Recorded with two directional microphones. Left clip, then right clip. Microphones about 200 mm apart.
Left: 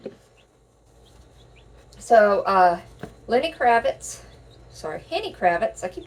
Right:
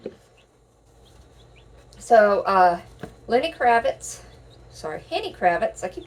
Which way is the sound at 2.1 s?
20° right (ahead or behind).